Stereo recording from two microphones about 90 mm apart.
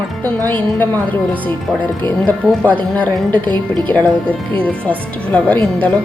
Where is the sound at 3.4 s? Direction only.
55° right (ahead or behind).